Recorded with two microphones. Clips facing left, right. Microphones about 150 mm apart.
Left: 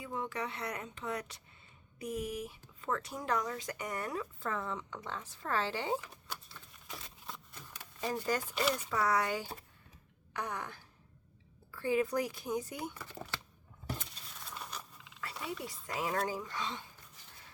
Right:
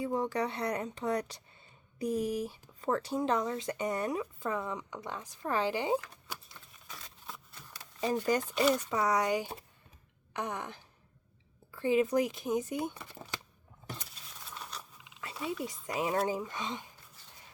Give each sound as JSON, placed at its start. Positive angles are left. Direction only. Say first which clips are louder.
{"t": 0.0, "sound": "speech", "louder": "right 7 dB", "side_deg": -35}
{"t": 6.2, "sound": "patter", "louder": "right 1 dB", "side_deg": -10}
{"t": 7.3, "sound": "a sound", "louder": "even", "side_deg": 0}
{"t": 8.5, "sound": "speech", "louder": "right 6 dB", "side_deg": 0}
{"t": 8.9, "sound": "speech", "louder": "right 3 dB", "side_deg": -20}
{"t": 14.5, "sound": "a sound", "louder": "even", "side_deg": 5}
{"t": 15.0, "sound": "roaring cats", "louder": "even", "side_deg": -20}
{"t": 15.4, "sound": "speech", "louder": "right 6 dB", "side_deg": -20}